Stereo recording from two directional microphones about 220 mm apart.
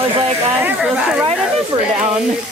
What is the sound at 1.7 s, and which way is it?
Speech, 25° right (ahead or behind).